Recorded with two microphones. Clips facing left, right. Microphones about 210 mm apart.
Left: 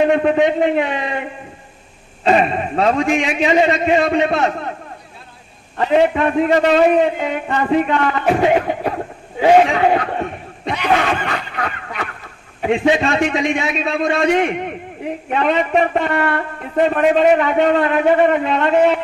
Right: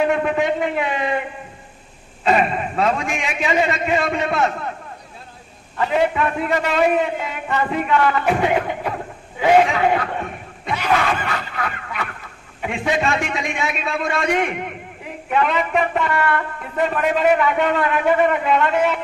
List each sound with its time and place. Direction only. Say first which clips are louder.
0.0 s a sound: left 4 dB; 35° left (ahead or behind)
0.4 s speech: left 5 dB; 30° left (ahead or behind)
2.2 s speech: left 3 dB; 35° left (ahead or behind)
5.8 s speech: left 4 dB; 35° left (ahead or behind)
10.9 s a sound: left 3 dB; 35° left (ahead or behind)
12.6 s speech: left 6 dB; 30° left (ahead or behind)